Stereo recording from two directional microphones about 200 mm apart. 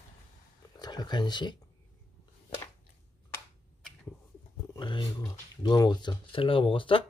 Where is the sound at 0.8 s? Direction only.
20° left (ahead or behind).